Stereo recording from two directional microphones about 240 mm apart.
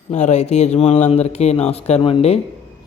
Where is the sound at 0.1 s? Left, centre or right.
Left.